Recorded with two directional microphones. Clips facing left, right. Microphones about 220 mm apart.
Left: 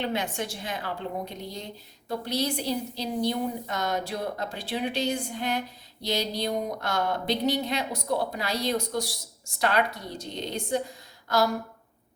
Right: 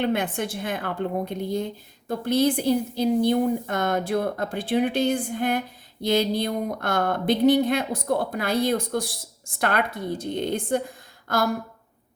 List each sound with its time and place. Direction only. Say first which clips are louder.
0.0 s a woman's voice: right 5 dB; 55° right (ahead or behind)